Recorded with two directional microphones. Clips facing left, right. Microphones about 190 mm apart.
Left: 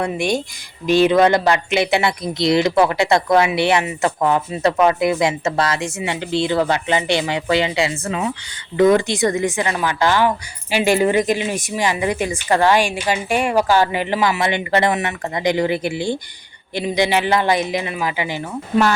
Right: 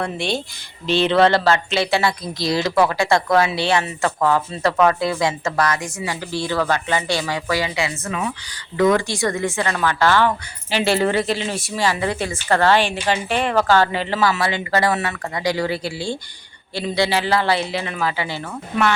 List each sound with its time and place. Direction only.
0.0 s a woman's voice: 15° left (ahead or behind)